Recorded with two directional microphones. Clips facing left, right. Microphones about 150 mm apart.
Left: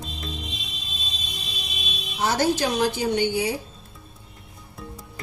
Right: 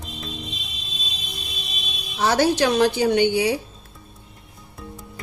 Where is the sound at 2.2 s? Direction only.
80° right.